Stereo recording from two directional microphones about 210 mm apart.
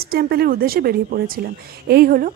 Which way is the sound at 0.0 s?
45° right (ahead or behind).